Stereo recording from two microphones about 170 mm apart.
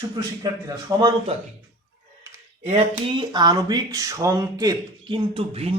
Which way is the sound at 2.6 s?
35° right (ahead or behind).